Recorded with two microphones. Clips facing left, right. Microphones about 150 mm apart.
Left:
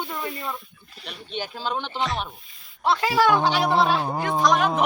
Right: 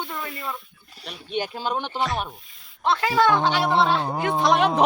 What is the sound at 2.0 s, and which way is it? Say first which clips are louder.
Speech: right 1 dB; centre (ahead or behind).